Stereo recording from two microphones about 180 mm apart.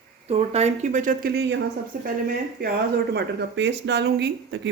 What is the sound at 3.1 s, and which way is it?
Speech, 75° right (ahead or behind).